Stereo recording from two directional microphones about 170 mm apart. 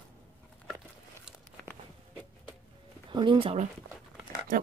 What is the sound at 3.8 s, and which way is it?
Dog, 90° right.